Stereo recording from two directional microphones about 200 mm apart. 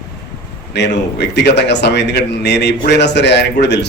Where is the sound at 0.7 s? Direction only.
60° left (ahead or behind).